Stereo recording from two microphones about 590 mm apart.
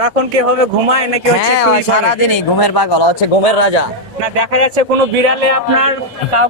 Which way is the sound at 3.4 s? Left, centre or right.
Left.